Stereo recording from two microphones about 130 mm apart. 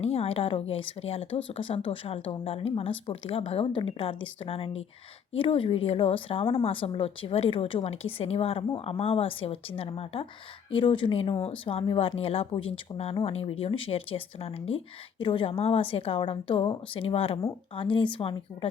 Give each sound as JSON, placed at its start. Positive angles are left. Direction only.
{"t": 0.0, "sound": "speech", "side_deg": 50}